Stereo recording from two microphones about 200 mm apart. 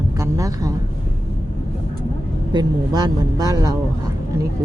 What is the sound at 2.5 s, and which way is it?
Speech, 20° right (ahead or behind).